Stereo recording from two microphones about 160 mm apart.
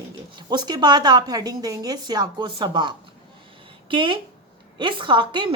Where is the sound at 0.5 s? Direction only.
25° right (ahead or behind).